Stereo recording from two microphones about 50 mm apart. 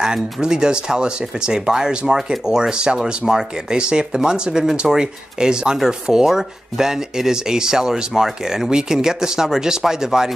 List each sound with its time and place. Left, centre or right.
0.0 s speech: centre